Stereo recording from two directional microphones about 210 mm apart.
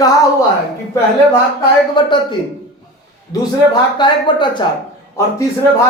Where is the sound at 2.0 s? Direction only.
20° left (ahead or behind).